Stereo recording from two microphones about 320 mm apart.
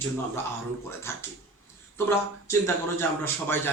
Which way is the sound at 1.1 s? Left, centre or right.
Centre.